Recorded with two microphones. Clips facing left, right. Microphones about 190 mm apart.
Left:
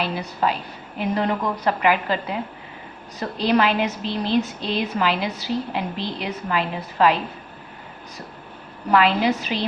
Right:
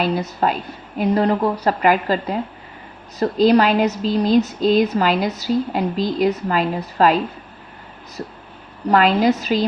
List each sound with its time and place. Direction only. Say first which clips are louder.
0.0 s a woman's voice: right 4 dB; 45° right (ahead or behind)
8.9 s a woman's voice: right 3 dB; 40° right (ahead or behind)